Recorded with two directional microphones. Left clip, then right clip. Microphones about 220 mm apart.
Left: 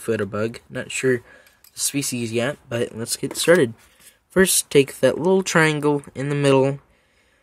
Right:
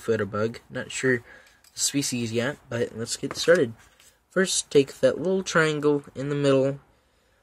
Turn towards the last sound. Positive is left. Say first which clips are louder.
# left 4 dB
turn(degrees=30)  # may be behind; listen again after turning